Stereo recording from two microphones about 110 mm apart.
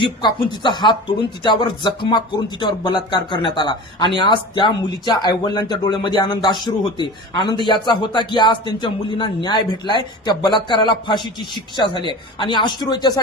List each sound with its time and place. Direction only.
0.0 s speech: 45° left (ahead or behind)